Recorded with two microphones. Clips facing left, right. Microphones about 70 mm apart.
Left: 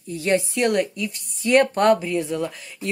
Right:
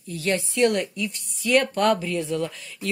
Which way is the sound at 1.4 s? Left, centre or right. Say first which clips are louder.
Left 4 dB; left.